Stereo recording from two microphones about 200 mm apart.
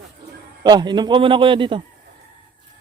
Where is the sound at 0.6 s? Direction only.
20° right (ahead or behind).